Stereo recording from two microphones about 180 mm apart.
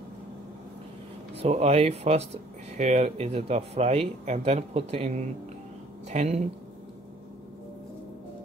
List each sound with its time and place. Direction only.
1.3 s speech: 35° right (ahead or behind)